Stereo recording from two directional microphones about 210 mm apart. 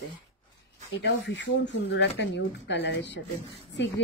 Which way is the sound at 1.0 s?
55° left (ahead or behind).